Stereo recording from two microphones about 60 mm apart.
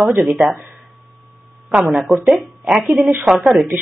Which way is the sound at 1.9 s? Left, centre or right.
Centre.